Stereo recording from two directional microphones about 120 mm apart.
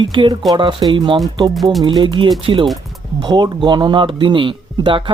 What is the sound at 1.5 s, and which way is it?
Music, centre (ahead or behind).